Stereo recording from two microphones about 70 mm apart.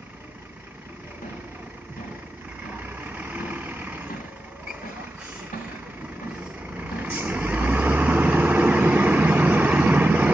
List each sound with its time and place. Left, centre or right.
3.2 s vehicle: right
7.0 s vehicle: right